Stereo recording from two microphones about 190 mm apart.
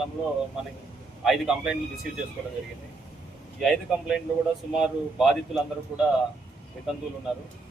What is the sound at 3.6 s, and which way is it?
Speech, centre (ahead or behind).